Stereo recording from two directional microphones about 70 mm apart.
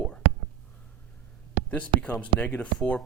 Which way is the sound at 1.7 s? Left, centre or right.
Left.